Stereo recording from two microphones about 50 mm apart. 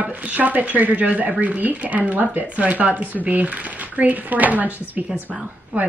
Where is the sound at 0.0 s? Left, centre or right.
Right.